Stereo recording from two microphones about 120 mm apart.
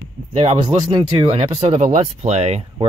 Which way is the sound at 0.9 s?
40° right (ahead or behind).